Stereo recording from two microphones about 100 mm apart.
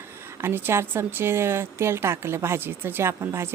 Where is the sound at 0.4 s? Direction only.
25° right (ahead or behind).